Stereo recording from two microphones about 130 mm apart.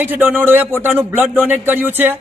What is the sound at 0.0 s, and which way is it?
A man's voice, 15° right (ahead or behind).